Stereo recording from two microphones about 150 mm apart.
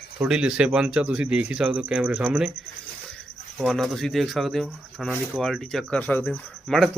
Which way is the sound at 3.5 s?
Centre (ahead or behind).